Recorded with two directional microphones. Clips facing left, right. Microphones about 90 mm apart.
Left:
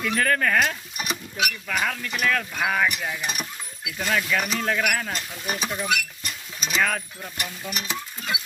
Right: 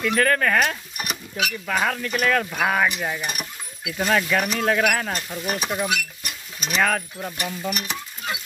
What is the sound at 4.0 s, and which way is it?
Speech, 25° right (ahead or behind).